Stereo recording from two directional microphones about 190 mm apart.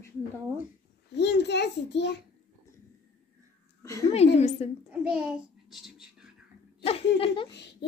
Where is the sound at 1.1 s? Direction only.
65° left (ahead or behind).